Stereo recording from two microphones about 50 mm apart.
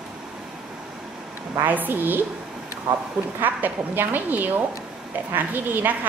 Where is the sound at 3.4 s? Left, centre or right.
Right.